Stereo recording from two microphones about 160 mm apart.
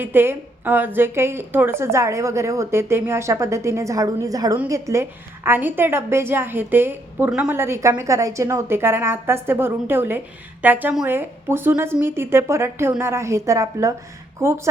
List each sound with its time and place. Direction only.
0.0 s a woman's voice: 15° right (ahead or behind)